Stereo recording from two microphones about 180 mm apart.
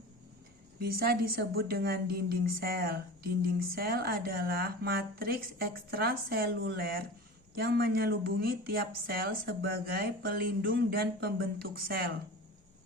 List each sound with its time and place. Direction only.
0.8 s speech: 55° right (ahead or behind)